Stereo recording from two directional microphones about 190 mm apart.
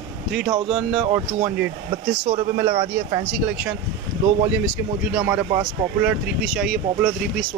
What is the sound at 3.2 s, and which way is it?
Speech, 5° right (ahead or behind).